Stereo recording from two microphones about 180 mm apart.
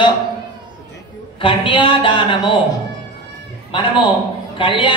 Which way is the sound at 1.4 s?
30° left (ahead or behind).